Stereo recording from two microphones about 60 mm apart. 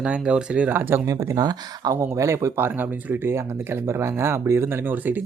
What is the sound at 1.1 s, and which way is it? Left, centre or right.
Speech, right.